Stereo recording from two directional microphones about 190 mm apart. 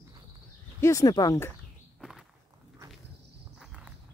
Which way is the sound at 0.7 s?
15° left (ahead or behind).